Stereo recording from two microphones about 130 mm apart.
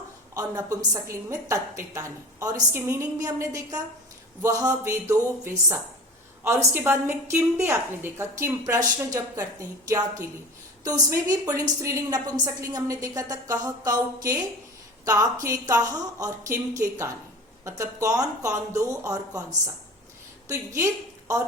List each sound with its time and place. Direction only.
0.3 s a woman's voice: 25° right (ahead or behind)
20.5 s a woman's voice: 20° right (ahead or behind)